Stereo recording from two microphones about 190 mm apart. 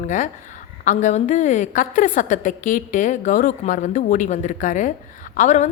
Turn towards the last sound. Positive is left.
turn(degrees=40)  # may be behind; listen again after turning